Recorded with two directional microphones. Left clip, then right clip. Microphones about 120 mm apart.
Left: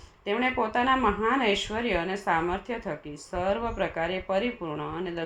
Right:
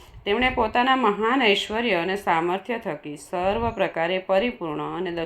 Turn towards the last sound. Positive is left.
turn(degrees=-25)  # may be behind; listen again after turning